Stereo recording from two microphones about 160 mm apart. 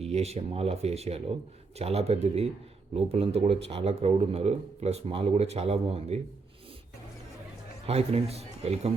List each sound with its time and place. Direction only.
0.0 s speech: 40° right (ahead or behind)
7.9 s speech: 40° right (ahead or behind)